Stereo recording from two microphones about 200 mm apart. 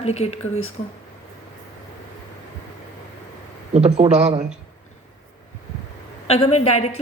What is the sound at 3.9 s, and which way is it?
Speech, 35° right (ahead or behind).